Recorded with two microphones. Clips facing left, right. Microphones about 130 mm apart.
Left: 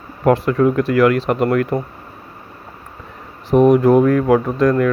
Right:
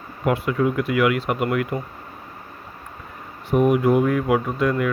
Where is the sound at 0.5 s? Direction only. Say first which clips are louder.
Left 6 dB; 40° left (ahead or behind).